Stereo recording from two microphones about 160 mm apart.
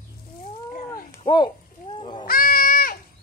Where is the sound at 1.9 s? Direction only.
35° left (ahead or behind).